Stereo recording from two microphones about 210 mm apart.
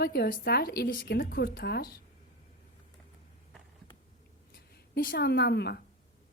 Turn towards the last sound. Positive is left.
turn(degrees=50)  # may be behind; listen again after turning